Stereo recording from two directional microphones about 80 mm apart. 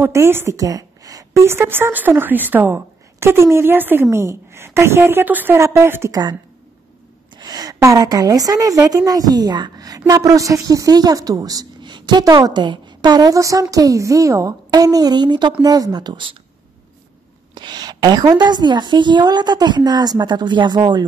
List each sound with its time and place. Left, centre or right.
0.1 s speech: right
0.6 s a sound: right
1.4 s a woman's voice: right
5.6 s speech: right
7.3 s a sound: right
7.8 s a woman's voice: right
11.8 s a sound: right
12.4 s a woman's voice: right
15.6 s a woman's voice: right
17.6 s a woman's voice: right